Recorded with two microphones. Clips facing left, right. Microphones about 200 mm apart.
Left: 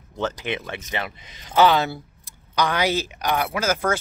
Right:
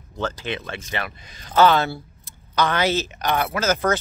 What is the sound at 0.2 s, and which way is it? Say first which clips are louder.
Speech: left 1 dB; 15° left (ahead or behind).